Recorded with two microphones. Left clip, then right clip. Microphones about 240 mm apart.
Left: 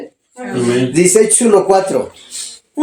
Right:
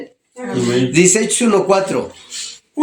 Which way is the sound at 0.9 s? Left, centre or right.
Right.